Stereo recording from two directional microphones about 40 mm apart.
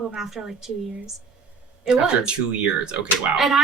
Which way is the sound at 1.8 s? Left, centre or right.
Right.